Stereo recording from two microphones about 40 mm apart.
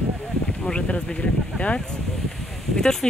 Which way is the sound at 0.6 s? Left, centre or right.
Left.